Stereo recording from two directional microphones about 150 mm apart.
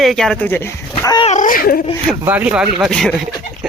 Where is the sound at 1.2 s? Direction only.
55° left (ahead or behind); by 1.8 s 70° left (ahead or behind).